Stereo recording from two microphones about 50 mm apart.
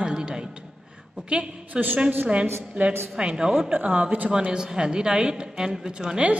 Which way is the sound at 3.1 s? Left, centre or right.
Centre.